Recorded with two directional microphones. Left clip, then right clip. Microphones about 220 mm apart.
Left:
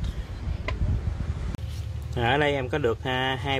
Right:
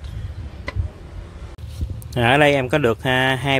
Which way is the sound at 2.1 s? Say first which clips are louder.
Right 8 dB; 40° right (ahead or behind).